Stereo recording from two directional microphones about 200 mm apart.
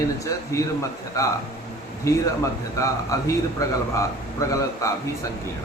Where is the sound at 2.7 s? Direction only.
15° left (ahead or behind).